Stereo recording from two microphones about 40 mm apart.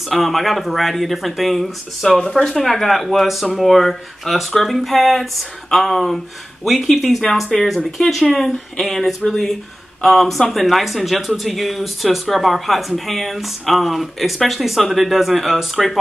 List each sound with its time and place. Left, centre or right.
0.1 s speech: centre
2.2 s speech: centre
2.5 s speech: centre